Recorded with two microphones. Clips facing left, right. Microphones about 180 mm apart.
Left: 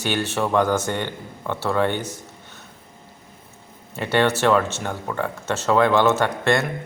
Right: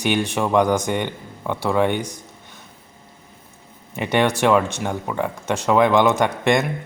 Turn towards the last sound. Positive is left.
turn(degrees=-15)  # may be behind; listen again after turning